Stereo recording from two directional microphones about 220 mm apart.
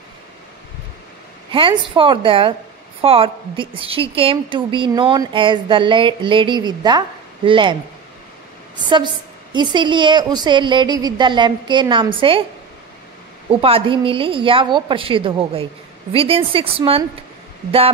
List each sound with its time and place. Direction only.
1.5 s a woman's voice: 25° right (ahead or behind)
8.7 s a woman's voice: 20° right (ahead or behind)
13.5 s a woman's voice: 25° right (ahead or behind)